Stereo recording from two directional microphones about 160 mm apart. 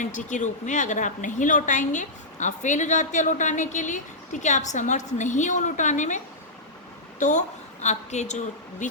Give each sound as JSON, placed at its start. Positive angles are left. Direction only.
{"t": 0.0, "sound": "a woman's voice", "side_deg": 50}